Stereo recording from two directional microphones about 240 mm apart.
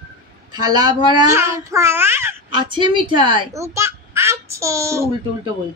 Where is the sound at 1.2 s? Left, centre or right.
Centre.